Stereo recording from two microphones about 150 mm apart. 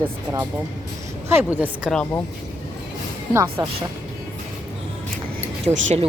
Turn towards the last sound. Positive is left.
turn(degrees=-45)  # may be behind; listen again after turning